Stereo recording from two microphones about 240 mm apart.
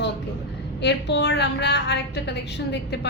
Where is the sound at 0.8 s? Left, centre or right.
Left.